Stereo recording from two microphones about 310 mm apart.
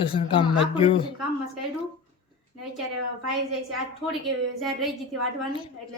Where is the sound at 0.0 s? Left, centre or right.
Centre.